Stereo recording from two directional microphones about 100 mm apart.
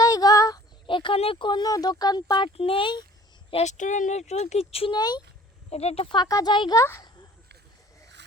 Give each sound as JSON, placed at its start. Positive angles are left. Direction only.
{"t": 0.0, "sound": "a sound", "side_deg": 40}
{"t": 0.9, "sound": "speech", "side_deg": 55}
{"t": 2.6, "sound": "speech", "side_deg": 65}
{"t": 3.5, "sound": "speech", "side_deg": 70}
{"t": 4.2, "sound": "speech", "side_deg": 90}
{"t": 4.9, "sound": "speech", "side_deg": 45}
{"t": 5.7, "sound": "speech", "side_deg": 90}
{"t": 6.1, "sound": "speech", "side_deg": 40}
{"t": 6.7, "sound": "speech", "side_deg": 25}